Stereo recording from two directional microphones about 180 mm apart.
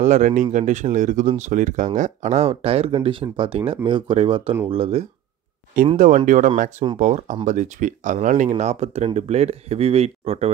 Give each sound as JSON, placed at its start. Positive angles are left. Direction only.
{"t": 0.0, "sound": "speech", "side_deg": -45}
{"t": 5.9, "sound": "speech", "side_deg": -45}